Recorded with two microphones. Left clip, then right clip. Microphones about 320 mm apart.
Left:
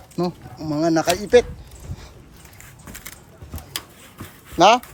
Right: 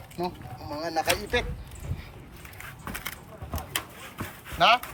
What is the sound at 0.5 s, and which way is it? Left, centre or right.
Speech, left.